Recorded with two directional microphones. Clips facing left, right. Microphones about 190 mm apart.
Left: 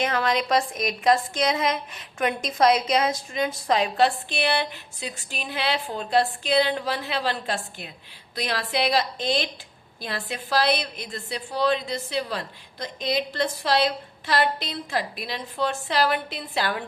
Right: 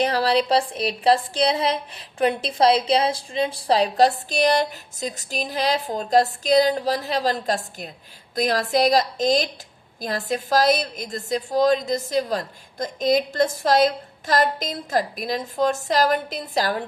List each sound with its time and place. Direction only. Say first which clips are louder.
0.0 s a woman's voice: right 4 dB; 35° right (ahead or behind)